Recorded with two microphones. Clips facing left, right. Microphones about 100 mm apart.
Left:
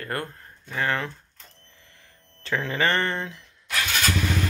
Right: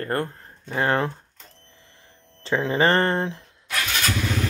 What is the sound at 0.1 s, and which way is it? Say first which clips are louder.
Speech: right 5 dB; 35° right (ahead or behind).